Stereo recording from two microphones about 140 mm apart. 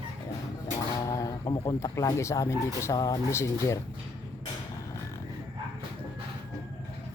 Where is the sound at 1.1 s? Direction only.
25° left (ahead or behind).